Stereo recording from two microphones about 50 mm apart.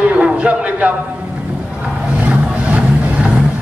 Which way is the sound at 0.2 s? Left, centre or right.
Right.